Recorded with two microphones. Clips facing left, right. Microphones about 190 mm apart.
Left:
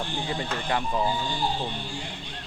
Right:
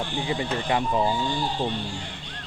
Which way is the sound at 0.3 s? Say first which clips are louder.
Right 4 dB; 15° right (ahead or behind).